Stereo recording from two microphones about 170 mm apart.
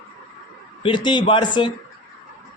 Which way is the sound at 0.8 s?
30° left (ahead or behind).